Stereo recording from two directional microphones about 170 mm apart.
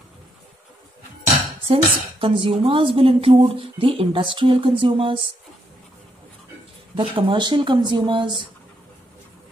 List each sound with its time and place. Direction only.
1.7 s a woman's voice: 30° right (ahead or behind)
7.0 s speech: 30° right (ahead or behind)